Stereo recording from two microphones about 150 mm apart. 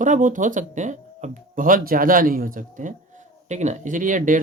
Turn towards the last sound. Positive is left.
turn(degrees=-60)  # may be behind; listen again after turning